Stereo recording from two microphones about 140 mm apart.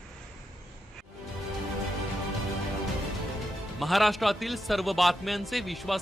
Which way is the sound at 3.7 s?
Centre (ahead or behind).